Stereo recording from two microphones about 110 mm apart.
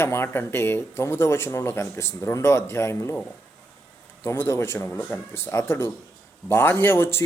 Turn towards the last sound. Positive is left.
turn(degrees=20)  # may be behind; listen again after turning